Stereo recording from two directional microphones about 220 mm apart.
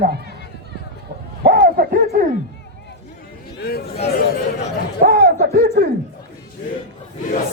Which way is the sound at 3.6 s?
45° left (ahead or behind).